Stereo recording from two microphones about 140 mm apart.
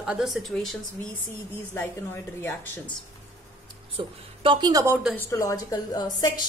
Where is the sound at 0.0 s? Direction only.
5° right (ahead or behind).